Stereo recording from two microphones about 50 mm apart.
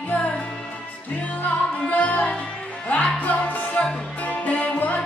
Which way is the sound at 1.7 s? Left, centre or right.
Left.